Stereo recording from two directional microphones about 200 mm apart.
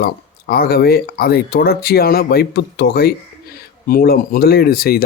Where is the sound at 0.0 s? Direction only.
50° left (ahead or behind).